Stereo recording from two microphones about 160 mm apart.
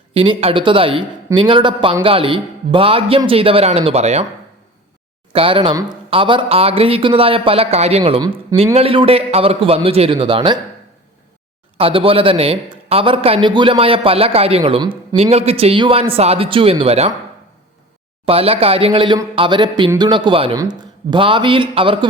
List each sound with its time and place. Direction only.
0.1 s a man's voice: 35° right (ahead or behind)
5.3 s a man's voice: 35° right (ahead or behind)
8.2 s speech: 25° right (ahead or behind)
8.7 s a man's voice: 35° right (ahead or behind)
11.8 s a man's voice: 35° right (ahead or behind)
18.3 s a man's voice: 35° right (ahead or behind)